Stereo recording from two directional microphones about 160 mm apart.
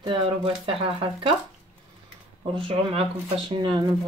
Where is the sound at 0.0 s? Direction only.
35° right (ahead or behind).